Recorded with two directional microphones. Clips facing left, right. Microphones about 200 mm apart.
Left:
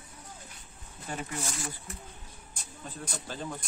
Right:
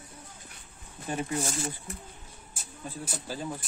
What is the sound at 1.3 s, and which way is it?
Speech, 30° right (ahead or behind).